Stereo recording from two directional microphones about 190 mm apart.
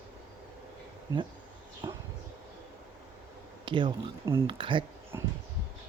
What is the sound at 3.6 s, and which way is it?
Speech, 25° right (ahead or behind).